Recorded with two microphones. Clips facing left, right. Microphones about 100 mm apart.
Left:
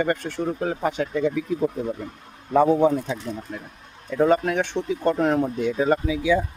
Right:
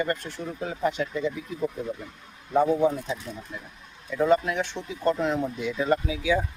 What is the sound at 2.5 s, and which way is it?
Speech, 80° left.